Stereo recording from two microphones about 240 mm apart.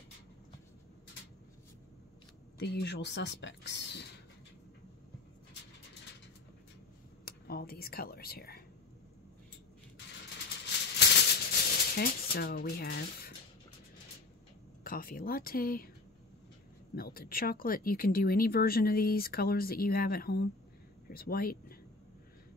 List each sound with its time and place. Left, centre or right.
2.6 s speech: left
7.2 s speech: left
11.0 s maraca: left
14.8 s speech: left
16.9 s speech: left